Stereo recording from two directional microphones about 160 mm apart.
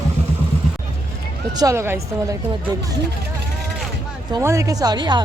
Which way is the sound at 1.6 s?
15° right (ahead or behind).